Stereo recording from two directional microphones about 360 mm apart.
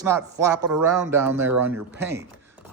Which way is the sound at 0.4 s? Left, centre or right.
Centre.